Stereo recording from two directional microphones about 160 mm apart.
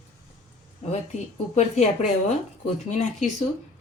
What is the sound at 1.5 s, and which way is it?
Speech, 45° left (ahead or behind).